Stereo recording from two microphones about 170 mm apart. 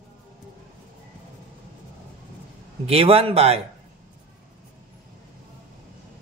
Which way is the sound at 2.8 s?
35° right (ahead or behind).